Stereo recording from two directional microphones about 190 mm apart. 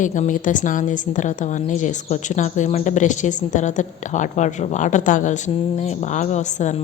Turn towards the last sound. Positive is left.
turn(degrees=40)  # may be behind; listen again after turning